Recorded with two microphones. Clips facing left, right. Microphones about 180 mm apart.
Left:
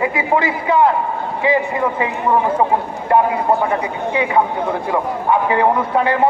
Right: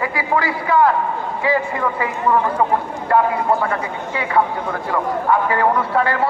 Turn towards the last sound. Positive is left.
turn(degrees=20)  # may be behind; listen again after turning